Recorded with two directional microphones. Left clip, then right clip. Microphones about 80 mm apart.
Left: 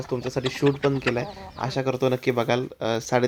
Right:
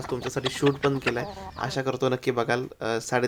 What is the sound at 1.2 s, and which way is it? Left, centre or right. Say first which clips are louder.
Speech: left 2 dB; left.